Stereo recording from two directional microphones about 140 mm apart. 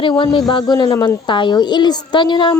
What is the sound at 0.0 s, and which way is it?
Speech, 40° left (ahead or behind).